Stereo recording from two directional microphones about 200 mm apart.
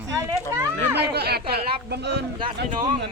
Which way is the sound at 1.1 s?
55° right (ahead or behind).